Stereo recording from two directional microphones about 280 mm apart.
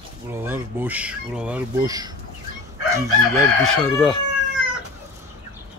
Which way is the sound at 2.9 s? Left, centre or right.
Centre.